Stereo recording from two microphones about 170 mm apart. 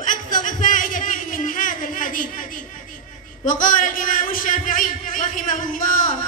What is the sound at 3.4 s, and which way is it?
A man's voice, 50° left (ahead or behind).